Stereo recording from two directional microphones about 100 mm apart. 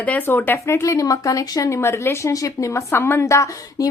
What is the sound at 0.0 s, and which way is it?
Speech, 15° left (ahead or behind).